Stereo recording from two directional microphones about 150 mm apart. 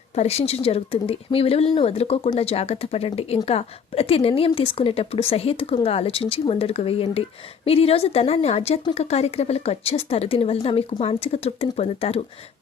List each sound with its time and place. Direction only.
0.2 s a woman's voice: 45° left (ahead or behind)